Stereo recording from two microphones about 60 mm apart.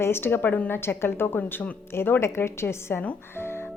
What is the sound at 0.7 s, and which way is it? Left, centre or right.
A woman's voice, left.